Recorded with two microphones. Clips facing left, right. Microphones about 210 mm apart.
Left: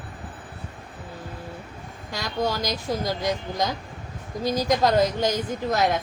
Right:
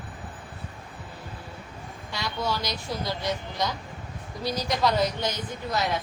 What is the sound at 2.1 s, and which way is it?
A woman's voice, 40° left (ahead or behind).